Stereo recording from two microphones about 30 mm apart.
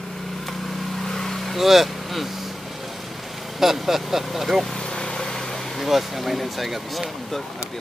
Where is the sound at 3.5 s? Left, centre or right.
Centre.